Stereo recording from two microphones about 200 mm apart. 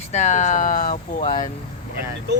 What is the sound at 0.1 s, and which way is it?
Speech, 35° left (ahead or behind).